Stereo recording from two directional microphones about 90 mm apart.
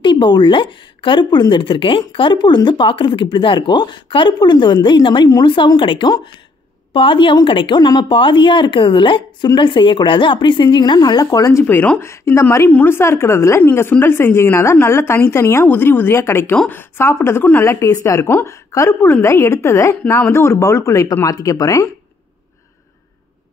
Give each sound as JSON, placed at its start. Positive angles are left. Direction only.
{"t": 0.0, "sound": "a woman's voice", "side_deg": 60}
{"t": 6.9, "sound": "a woman's voice", "side_deg": 70}
{"t": 11.6, "sound": "speech", "side_deg": 15}
{"t": 12.0, "sound": "a woman's voice", "side_deg": 30}